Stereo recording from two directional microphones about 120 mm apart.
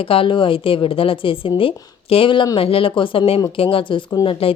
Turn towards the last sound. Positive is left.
turn(degrees=50)  # may be behind; listen again after turning